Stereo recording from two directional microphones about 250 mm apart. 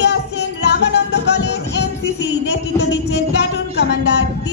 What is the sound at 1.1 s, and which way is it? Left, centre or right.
Music, left.